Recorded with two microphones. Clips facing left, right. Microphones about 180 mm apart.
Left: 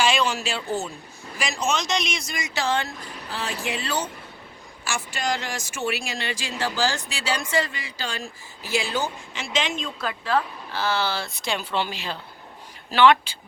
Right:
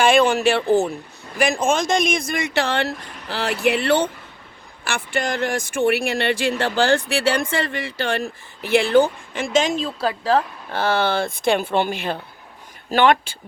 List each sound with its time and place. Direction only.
0.0 s speech: 55° right (ahead or behind); by 10.4 s 35° right (ahead or behind)
10.7 s speech: 55° right (ahead or behind)